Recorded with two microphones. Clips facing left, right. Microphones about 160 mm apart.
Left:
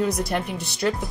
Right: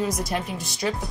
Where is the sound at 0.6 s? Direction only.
65° left (ahead or behind).